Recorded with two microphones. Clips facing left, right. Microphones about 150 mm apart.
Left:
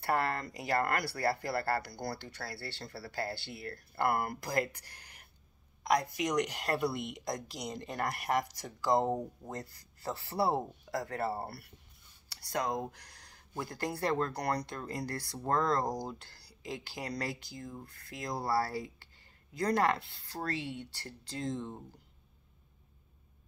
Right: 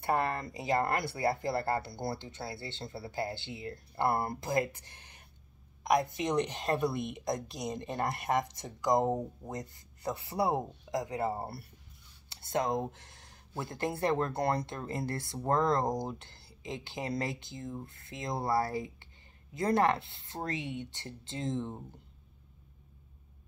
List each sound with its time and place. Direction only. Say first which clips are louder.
0.0 s speech: right 1 dB; 20° right (ahead or behind)